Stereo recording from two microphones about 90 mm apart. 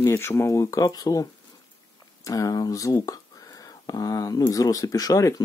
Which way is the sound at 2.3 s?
40° left (ahead or behind).